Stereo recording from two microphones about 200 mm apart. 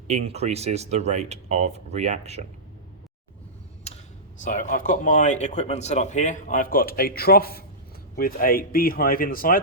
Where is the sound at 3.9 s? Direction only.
30° left (ahead or behind).